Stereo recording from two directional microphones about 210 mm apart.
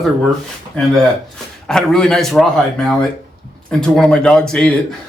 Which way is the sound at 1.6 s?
5° left (ahead or behind).